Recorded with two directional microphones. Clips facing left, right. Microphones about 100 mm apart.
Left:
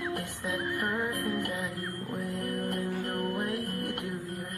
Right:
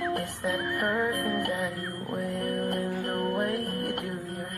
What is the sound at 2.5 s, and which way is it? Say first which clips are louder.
Music: right 2 dB; 35° right (ahead or behind).